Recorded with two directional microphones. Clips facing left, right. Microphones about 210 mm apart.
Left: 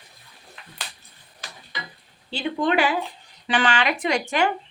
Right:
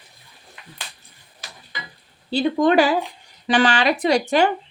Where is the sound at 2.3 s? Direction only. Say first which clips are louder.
Right 6 dB; 40° right (ahead or behind).